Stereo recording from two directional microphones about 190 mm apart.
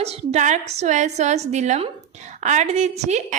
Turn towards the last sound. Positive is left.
turn(degrees=-35)  # may be behind; listen again after turning